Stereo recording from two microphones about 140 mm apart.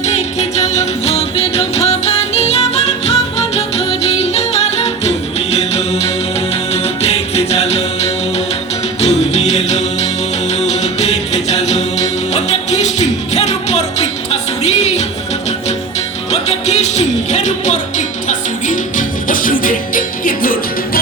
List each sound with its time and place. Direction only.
0.0 s music: 55° left (ahead or behind)
16.3 s music: 50° left (ahead or behind); by 21.0 s 90° left